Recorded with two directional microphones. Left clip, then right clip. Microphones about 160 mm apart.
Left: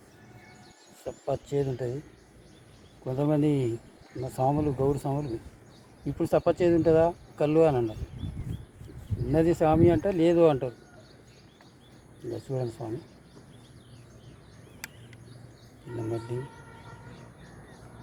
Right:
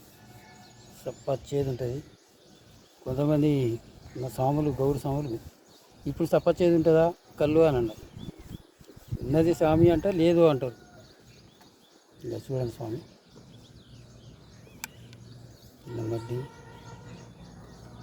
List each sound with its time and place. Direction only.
1.1 s speech: 25° right (ahead or behind)
3.0 s speech: 20° right (ahead or behind)
9.3 s speech: 20° right (ahead or behind)
12.3 s speech: 15° right (ahead or behind)